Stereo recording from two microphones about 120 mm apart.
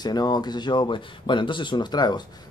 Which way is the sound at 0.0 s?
35° left (ahead or behind).